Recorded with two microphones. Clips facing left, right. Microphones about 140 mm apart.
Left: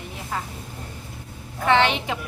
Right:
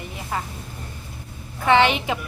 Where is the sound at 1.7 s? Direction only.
10° right (ahead or behind).